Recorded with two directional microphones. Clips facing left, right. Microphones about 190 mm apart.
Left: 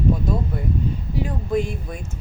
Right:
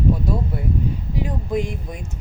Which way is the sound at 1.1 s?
15° right (ahead or behind).